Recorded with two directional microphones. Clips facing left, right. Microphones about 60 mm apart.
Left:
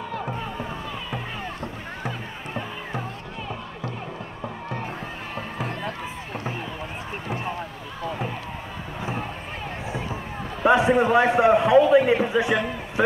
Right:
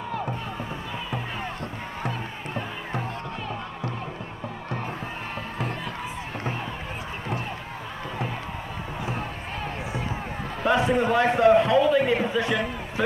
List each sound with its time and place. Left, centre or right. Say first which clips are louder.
2.0 s music: right 1 dB; centre
5.3 s music: left 2 dB; centre
10.6 s a man's voice: left 4 dB; centre